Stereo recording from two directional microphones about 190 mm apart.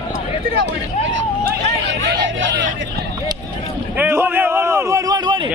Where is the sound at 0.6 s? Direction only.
70° right (ahead or behind).